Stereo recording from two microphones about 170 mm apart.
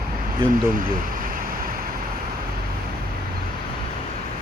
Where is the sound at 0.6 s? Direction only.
55° right (ahead or behind).